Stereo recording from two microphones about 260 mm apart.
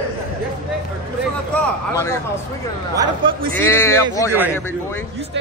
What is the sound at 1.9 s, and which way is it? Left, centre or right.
Speech, centre.